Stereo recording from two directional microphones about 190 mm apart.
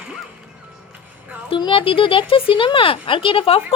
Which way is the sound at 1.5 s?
25° left (ahead or behind).